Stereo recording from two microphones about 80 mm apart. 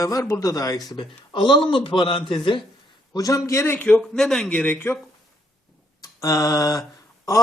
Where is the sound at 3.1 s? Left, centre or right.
Left.